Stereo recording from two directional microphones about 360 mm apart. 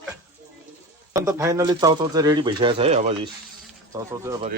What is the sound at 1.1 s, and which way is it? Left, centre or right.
Speech, centre.